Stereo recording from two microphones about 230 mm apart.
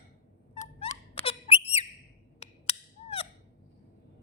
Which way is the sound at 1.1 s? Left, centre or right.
Left.